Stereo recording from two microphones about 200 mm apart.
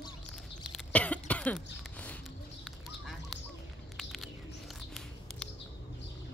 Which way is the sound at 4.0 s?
Centre (ahead or behind).